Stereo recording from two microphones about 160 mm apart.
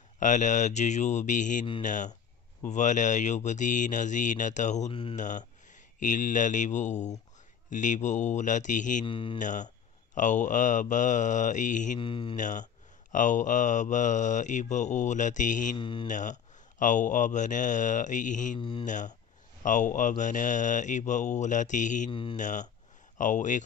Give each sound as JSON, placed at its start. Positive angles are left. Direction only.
{"t": 0.2, "sound": "mantra", "side_deg": 50}
{"t": 9.0, "sound": "speech", "side_deg": 30}
{"t": 9.4, "sound": "mantra", "side_deg": 50}
{"t": 12.0, "sound": "speech", "side_deg": 35}
{"t": 12.4, "sound": "mantra", "side_deg": 50}
{"t": 15.8, "sound": "speech", "side_deg": 30}
{"t": 16.1, "sound": "mantra", "side_deg": 50}
{"t": 18.6, "sound": "speech", "side_deg": 35}
{"t": 18.9, "sound": "mantra", "side_deg": 50}
{"t": 22.1, "sound": "speech", "side_deg": 30}
{"t": 22.4, "sound": "mantra", "side_deg": 50}